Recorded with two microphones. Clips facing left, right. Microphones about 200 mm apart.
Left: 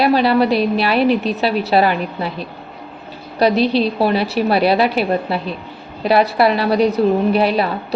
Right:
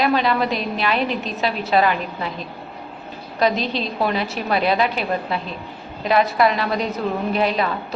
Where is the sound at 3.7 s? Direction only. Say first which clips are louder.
Left 7 dB; 35° left (ahead or behind).